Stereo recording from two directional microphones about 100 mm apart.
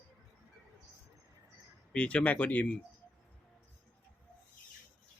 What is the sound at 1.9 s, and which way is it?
Speech, 10° left (ahead or behind).